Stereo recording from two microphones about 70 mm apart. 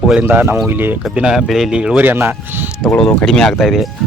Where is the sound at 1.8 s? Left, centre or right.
Centre.